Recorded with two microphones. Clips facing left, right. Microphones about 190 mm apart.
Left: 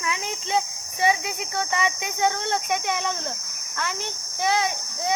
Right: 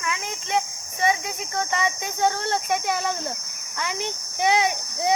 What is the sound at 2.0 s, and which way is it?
A child's voice, centre (ahead or behind).